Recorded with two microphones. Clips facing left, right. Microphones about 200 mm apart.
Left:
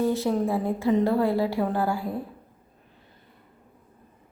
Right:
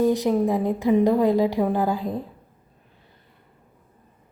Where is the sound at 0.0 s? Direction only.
15° right (ahead or behind).